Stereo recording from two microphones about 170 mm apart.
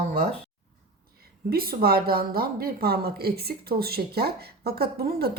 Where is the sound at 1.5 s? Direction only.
60° right (ahead or behind).